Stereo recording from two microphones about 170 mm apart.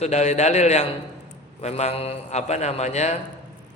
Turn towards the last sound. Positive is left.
turn(degrees=40)  # may be behind; listen again after turning